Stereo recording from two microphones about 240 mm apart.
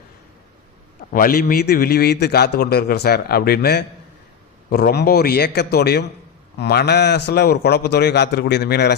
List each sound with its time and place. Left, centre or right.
1.1 s a man's voice: left